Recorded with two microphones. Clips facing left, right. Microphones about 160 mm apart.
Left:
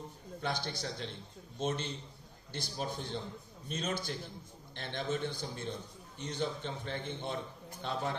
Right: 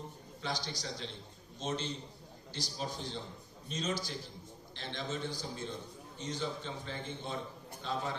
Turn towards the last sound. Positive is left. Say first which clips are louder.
# even
turn(degrees=55)  # may be behind; listen again after turning